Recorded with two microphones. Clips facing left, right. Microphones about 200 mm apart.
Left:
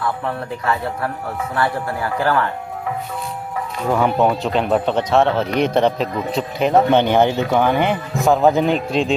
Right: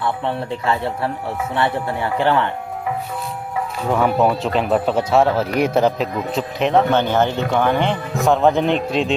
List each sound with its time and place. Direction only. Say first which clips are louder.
0.0 s speech: right 1 dB; 25° right (ahead or behind)
3.8 s speech: even; centre (ahead or behind)
6.9 s speech: left 3 dB; 15° left (ahead or behind); by 9.1 s centre (ahead or behind)